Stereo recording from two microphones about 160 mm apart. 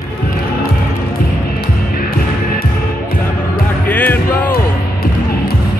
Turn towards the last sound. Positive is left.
turn(degrees=10)  # may be behind; listen again after turning